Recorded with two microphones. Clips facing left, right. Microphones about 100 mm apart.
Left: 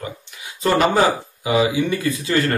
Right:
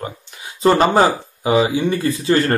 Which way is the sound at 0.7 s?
35° right (ahead or behind).